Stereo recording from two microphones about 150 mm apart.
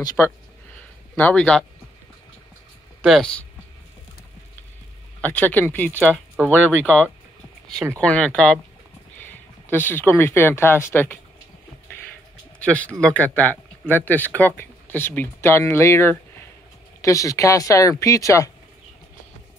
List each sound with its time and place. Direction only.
0.2 s speech: 10° left (ahead or behind)
3.0 s speech: 5° left (ahead or behind)
5.2 s speech: 10° left (ahead or behind)
12.5 s speech: 10° left (ahead or behind)